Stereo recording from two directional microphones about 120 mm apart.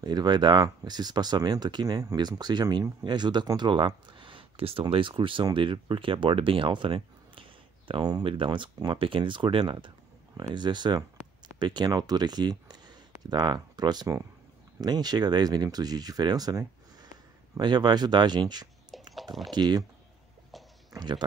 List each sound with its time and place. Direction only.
0.0 s speech: 35° right (ahead or behind)
18.9 s a sound: centre (ahead or behind)
19.5 s speech: 35° right (ahead or behind)
20.9 s speech: 35° right (ahead or behind)